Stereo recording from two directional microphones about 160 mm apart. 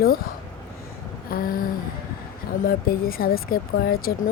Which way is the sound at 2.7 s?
65° left (ahead or behind).